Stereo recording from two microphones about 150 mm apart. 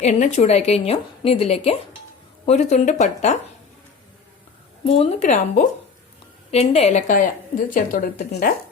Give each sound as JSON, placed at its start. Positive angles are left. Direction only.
{"t": 0.0, "sound": "a woman's voice", "side_deg": 50}
{"t": 4.9, "sound": "a woman's voice", "side_deg": 45}